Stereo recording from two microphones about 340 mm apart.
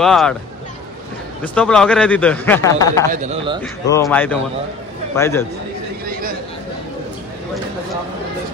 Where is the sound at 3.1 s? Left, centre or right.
Centre.